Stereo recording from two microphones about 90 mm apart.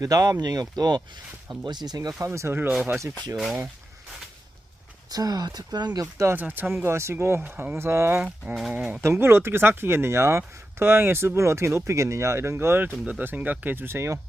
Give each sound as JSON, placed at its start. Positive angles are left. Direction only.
{"t": 0.0, "sound": "speech", "side_deg": -40}
{"t": 2.1, "sound": "speech", "side_deg": -35}
{"t": 2.6, "sound": "speech", "side_deg": -20}
{"t": 3.3, "sound": "speech", "side_deg": 0}
{"t": 5.1, "sound": "speech", "side_deg": -45}
{"t": 6.3, "sound": "speech", "side_deg": -20}
{"t": 8.7, "sound": "speech", "side_deg": -15}
{"t": 9.0, "sound": "speech", "side_deg": -25}